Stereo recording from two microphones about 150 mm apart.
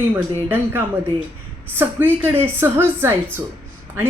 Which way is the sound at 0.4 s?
15° right (ahead or behind).